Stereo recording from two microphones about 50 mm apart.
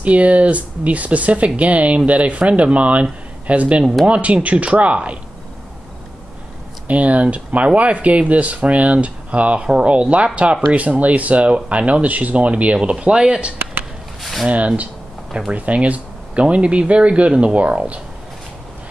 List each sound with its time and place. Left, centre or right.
0.0 s speech: right
6.9 s speech: right
14.2 s speech: centre
15.5 s speech: right